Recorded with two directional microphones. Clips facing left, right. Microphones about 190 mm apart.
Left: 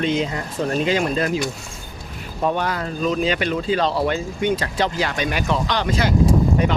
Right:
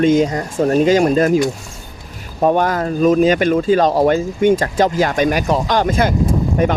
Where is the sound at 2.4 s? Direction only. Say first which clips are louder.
Right 7 dB; 45° right (ahead or behind).